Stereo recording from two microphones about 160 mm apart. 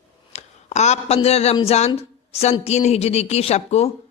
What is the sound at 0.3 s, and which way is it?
A woman's voice, 45° left (ahead or behind).